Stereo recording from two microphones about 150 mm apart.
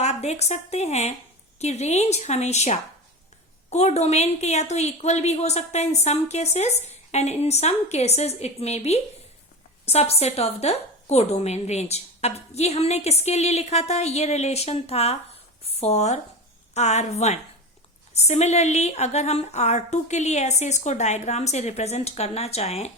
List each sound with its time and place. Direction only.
0.0 s a woman's voice: 45° left (ahead or behind)